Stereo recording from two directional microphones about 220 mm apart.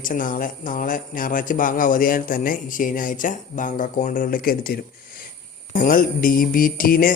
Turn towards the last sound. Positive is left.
turn(degrees=40)  # may be behind; listen again after turning